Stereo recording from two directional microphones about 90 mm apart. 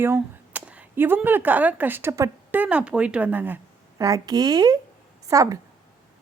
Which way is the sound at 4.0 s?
45° right (ahead or behind).